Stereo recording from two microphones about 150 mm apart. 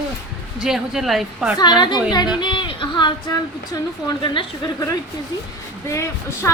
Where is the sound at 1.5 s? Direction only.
30° left (ahead or behind).